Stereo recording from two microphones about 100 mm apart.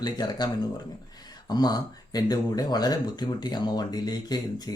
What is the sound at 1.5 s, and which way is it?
Speech, 40° left (ahead or behind).